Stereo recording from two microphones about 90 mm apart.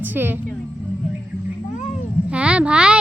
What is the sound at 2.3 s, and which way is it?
Speech, 10° right (ahead or behind).